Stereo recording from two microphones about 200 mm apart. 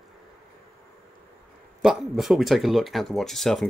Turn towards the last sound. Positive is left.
turn(degrees=0)  # may be behind; listen again after turning